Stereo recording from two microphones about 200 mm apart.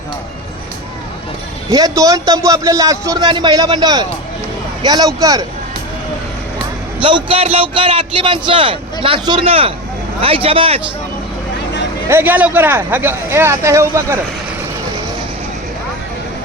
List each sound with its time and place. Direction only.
1.7 s a man's voice: 20° right (ahead or behind)
7.0 s a man's voice: 25° right (ahead or behind)
12.0 s speech: 10° right (ahead or behind)